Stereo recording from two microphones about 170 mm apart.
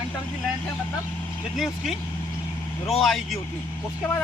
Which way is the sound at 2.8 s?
Centre (ahead or behind).